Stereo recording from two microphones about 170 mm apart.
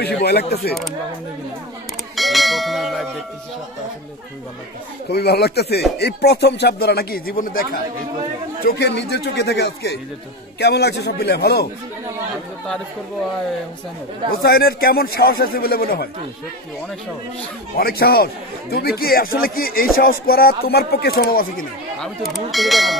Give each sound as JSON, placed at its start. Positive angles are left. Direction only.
{"t": 0.0, "sound": "speech", "side_deg": 70}
{"t": 2.1, "sound": "church bell", "side_deg": 0}
{"t": 5.1, "sound": "speech", "side_deg": 70}
{"t": 8.6, "sound": "speech", "side_deg": 80}
{"t": 14.4, "sound": "a man's voice", "side_deg": 65}
{"t": 17.7, "sound": "a man's voice", "side_deg": 65}
{"t": 22.0, "sound": "speech", "side_deg": 0}